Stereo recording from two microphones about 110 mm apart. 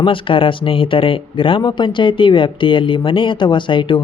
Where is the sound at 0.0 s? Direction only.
50° left (ahead or behind).